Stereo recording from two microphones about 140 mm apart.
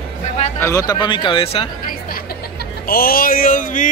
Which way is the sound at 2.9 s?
90° left.